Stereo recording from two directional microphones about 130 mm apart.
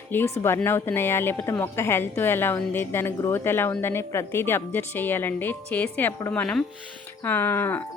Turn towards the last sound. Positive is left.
turn(degrees=15)  # may be behind; listen again after turning